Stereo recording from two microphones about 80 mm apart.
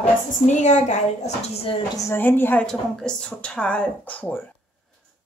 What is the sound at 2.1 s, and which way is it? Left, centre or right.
Speech, left.